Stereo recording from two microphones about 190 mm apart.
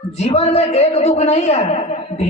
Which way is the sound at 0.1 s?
35° left (ahead or behind).